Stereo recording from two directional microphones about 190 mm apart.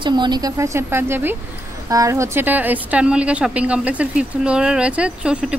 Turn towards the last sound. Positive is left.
turn(degrees=-5)  # may be behind; listen again after turning